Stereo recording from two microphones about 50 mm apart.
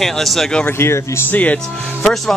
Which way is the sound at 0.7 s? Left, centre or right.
Left.